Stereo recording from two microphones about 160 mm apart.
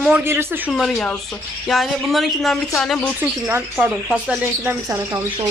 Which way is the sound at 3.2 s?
10° right (ahead or behind).